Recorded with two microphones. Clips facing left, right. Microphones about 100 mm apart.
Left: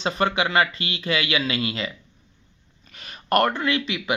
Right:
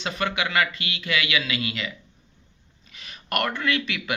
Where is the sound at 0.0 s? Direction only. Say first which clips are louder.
Left 4 dB; 35° left (ahead or behind).